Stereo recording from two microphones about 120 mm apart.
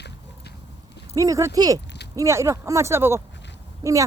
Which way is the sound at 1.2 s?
25° right (ahead or behind).